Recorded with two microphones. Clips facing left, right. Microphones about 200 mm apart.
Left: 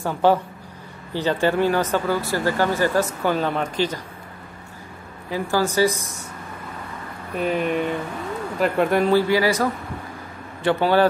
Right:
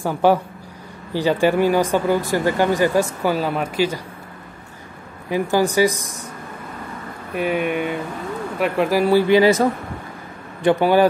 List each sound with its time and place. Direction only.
0.0 s speech: 10° right (ahead or behind)
5.3 s speech: 15° right (ahead or behind)
7.3 s speech: 5° right (ahead or behind)
9.3 s speech: 25° right (ahead or behind)